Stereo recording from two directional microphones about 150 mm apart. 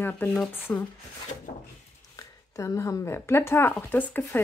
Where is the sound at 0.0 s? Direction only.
10° left (ahead or behind).